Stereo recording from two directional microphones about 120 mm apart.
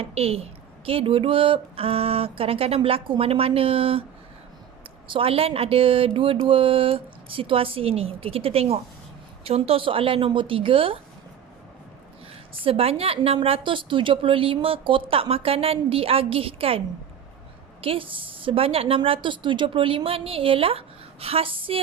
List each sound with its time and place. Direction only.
0.0 s a woman's voice: 55° right (ahead or behind)
5.0 s a woman's voice: 50° right (ahead or behind)
12.6 s a woman's voice: 55° right (ahead or behind)